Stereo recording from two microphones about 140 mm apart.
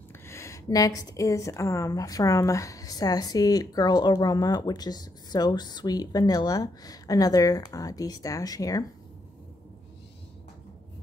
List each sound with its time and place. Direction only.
0.3 s a woman's voice: 20° left (ahead or behind)